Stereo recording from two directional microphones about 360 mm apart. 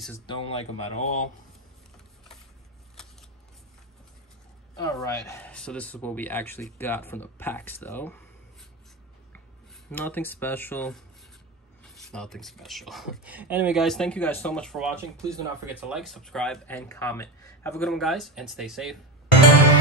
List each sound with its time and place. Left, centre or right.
0.3 s speech: centre
4.7 s speech: centre
9.8 s speech: centre